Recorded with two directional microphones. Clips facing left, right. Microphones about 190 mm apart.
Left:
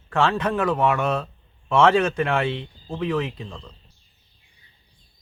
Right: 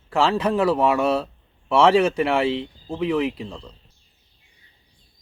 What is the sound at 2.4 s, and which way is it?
Speech, 25° right (ahead or behind).